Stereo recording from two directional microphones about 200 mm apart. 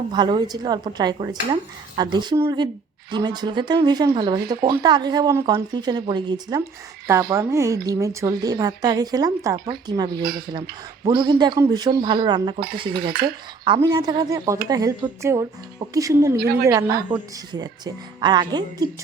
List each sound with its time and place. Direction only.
0.1 s speech: 20° right (ahead or behind)
13.7 s speech: 20° right (ahead or behind)